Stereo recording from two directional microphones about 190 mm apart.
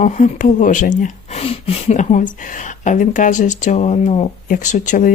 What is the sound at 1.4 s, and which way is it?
Speech, 30° left (ahead or behind).